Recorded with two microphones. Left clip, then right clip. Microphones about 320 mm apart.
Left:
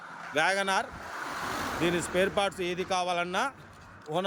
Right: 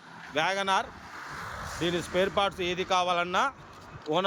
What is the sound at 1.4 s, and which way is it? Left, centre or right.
Vehicle, left.